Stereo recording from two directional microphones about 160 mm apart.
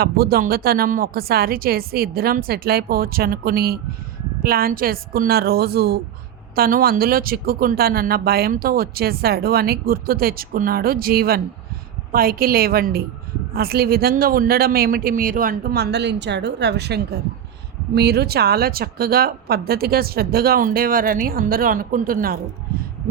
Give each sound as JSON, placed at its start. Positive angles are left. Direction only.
{"t": 0.0, "sound": "speech", "side_deg": -70}
{"t": 6.6, "sound": "speech", "side_deg": -65}